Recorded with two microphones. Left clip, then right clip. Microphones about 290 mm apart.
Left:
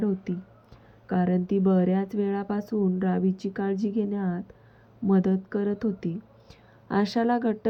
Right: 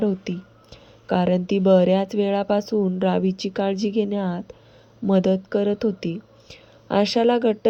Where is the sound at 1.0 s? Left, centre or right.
Centre.